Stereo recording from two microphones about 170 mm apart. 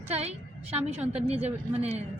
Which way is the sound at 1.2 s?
35° right (ahead or behind).